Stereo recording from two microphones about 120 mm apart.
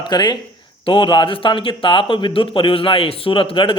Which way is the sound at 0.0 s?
35° left (ahead or behind).